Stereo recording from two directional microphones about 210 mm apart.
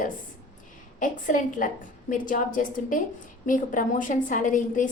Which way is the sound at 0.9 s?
40° left (ahead or behind).